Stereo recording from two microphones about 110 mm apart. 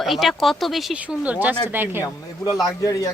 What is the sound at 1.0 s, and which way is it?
Speech, 10° right (ahead or behind).